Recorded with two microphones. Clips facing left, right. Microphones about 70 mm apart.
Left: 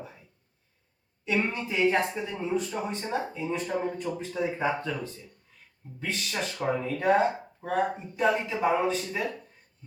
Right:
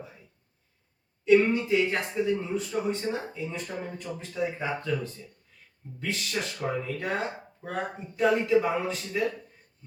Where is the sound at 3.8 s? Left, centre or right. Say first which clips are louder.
Left 5 dB; left.